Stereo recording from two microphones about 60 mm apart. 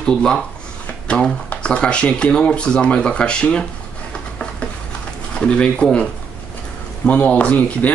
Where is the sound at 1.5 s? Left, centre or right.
Centre.